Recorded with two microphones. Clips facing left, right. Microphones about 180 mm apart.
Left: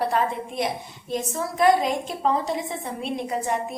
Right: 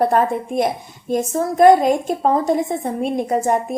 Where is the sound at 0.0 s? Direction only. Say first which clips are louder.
Right 7 dB; 50° right (ahead or behind).